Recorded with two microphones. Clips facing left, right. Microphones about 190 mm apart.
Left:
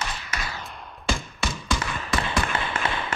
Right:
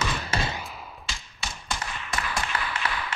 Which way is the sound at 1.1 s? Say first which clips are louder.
Left 15 dB; 55° left (ahead or behind).